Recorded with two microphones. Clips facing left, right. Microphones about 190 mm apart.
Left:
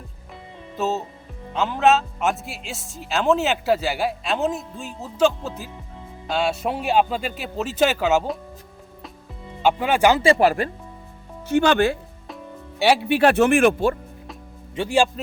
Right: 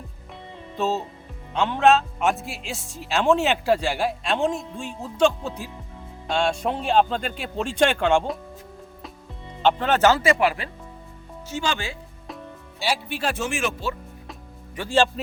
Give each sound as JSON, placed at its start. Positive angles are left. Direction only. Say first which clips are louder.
{"t": 0.8, "sound": "a man's voice", "louder": "even", "side_deg": 5}
{"t": 9.6, "sound": "speech", "louder": "left 1 dB", "side_deg": 10}
{"t": 10.2, "sound": "speech", "louder": "left 4 dB", "side_deg": 40}
{"t": 11.4, "sound": "speech", "louder": "left 10 dB", "side_deg": 60}
{"t": 14.8, "sound": "speech", "louder": "left 1 dB", "side_deg": 15}